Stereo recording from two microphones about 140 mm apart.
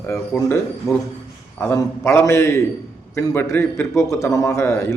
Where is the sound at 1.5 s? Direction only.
20° left (ahead or behind).